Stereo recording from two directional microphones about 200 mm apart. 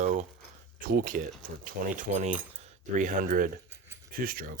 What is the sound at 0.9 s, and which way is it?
Speech, 45° right (ahead or behind).